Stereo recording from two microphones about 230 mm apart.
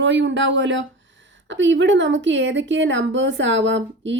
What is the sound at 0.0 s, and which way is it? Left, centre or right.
A woman's voice, right.